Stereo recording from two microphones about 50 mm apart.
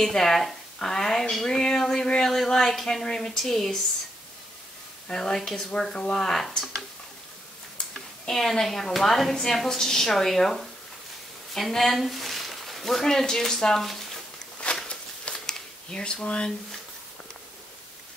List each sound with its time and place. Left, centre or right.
0.0 s speech: centre
5.0 s speech: centre
8.3 s a woman's voice: centre
14.9 s shuffling cards: centre